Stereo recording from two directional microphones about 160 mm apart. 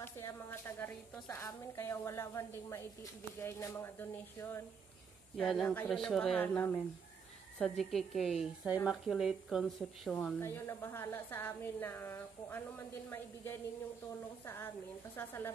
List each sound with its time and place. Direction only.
0.0 s a woman's voice: 15° left (ahead or behind)
5.4 s a woman's voice: 5° left (ahead or behind)
10.4 s a woman's voice: 15° left (ahead or behind)